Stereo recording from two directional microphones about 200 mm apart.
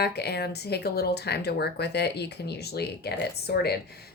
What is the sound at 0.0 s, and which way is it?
Speech, 55° left (ahead or behind).